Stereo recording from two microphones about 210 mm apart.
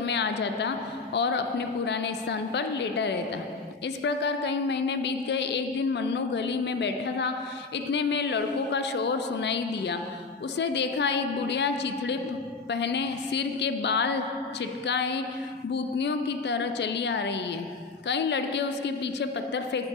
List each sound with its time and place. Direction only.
0.0 s a woman's voice: 55° left (ahead or behind)